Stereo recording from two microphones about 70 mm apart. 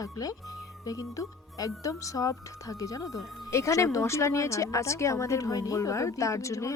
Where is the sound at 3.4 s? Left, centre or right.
Left.